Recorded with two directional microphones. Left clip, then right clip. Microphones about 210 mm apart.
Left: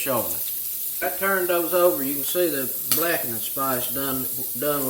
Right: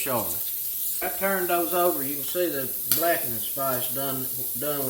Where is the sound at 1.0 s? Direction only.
Centre (ahead or behind).